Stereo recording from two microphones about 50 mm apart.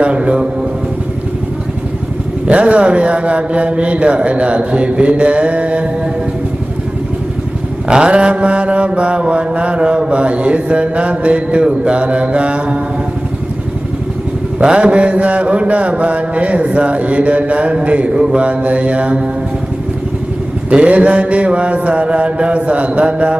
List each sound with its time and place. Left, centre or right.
0.0 s a man's voice: right
2.4 s mantra: right
7.9 s mantra: centre
14.6 s mantra: centre
20.7 s mantra: right